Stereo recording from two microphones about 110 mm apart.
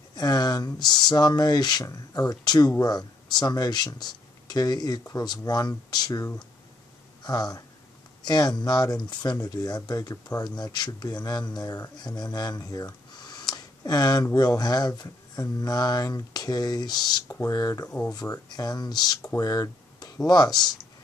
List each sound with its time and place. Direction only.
0.1 s speech: 35° left (ahead or behind)
17.8 s speech: 10° left (ahead or behind)
18.1 s speech: 35° left (ahead or behind)